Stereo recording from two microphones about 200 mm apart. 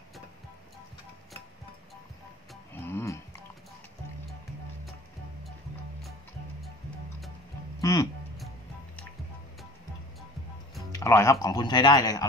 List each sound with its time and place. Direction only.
2.7 s livestock: 10° left (ahead or behind)
7.8 s music: 15° left (ahead or behind)
11.0 s speech: 15° left (ahead or behind)